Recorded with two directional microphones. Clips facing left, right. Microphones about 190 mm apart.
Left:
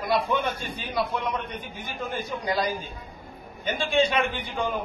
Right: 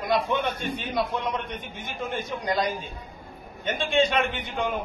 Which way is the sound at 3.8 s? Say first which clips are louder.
Even; centre (ahead or behind).